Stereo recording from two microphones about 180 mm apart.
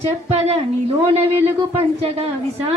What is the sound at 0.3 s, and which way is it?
A woman's voice, 35° right (ahead or behind).